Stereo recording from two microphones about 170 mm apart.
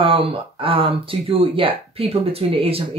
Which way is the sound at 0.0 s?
30° right (ahead or behind).